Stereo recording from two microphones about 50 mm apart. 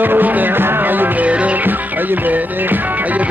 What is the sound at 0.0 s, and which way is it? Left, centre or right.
Music, right.